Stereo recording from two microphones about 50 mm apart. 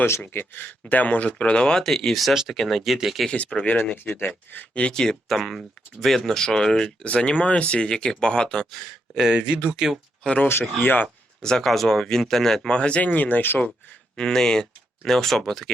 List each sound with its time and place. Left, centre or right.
0.3 s speech: left; by 3.2 s centre
3.7 s speech: left
4.9 s speech: centre
5.4 s speech: centre
8.7 s speech: centre
9.4 s speech: right
9.7 s speech: centre
10.2 s speech: left
10.5 s speech: left
11.4 s speech: centre
12.6 s speech: left
13.0 s speech: left
14.2 s speech: centre